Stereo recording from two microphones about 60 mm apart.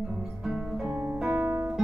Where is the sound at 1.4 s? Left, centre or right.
Right.